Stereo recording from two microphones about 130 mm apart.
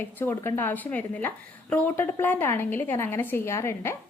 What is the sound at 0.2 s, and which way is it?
A woman's voice, 15° left (ahead or behind).